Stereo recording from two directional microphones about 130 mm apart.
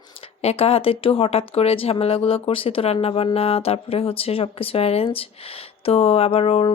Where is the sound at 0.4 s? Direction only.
50° left (ahead or behind).